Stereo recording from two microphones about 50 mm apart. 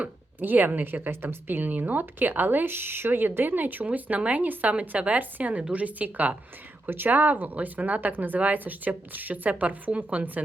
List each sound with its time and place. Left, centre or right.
0.3 s a woman's voice: right